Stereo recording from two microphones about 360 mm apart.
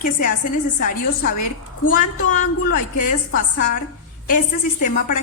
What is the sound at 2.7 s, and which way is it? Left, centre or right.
Speech, left.